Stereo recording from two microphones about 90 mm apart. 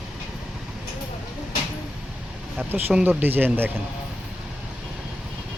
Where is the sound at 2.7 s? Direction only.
20° right (ahead or behind).